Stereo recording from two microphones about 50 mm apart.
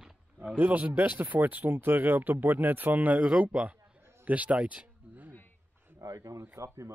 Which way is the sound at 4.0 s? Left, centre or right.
Right.